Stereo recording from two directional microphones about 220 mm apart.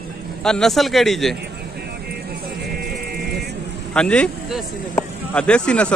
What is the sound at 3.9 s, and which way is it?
Speech, 5° left (ahead or behind).